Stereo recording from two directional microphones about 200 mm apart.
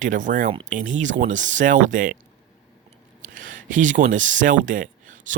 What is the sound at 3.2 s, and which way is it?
Speech, 40° right (ahead or behind).